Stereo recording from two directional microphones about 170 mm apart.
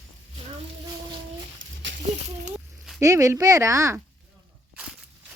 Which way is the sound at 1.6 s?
90° right.